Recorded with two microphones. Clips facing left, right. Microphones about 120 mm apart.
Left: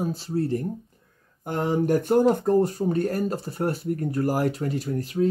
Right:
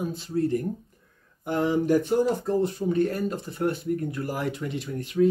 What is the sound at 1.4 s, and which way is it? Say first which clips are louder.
Speech: even; 45° left (ahead or behind).